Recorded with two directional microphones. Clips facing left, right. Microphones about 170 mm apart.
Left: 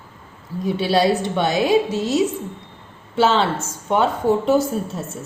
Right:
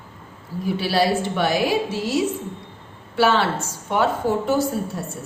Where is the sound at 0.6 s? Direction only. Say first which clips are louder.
Left 3 dB; 20° left (ahead or behind).